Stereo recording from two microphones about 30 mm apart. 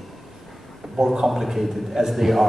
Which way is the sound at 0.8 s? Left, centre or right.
Centre.